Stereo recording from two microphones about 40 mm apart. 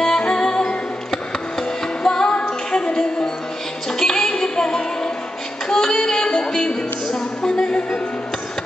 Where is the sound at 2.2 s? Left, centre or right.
Left.